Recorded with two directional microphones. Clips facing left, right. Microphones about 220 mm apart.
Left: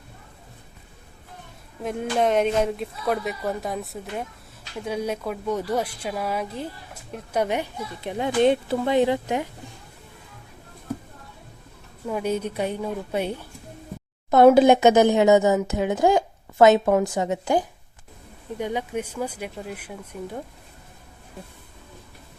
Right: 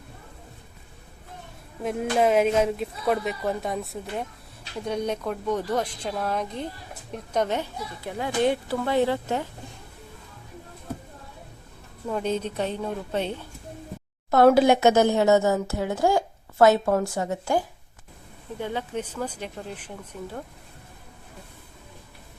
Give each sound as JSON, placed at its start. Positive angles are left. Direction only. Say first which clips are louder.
{"t": 1.8, "sound": "a woman's voice", "louder": "right 1 dB", "side_deg": 0}
{"t": 12.0, "sound": "a woman's voice", "louder": "left 1 dB", "side_deg": 10}